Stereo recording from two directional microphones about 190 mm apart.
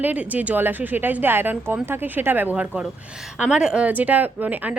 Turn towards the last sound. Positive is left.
turn(degrees=-10)  # may be behind; listen again after turning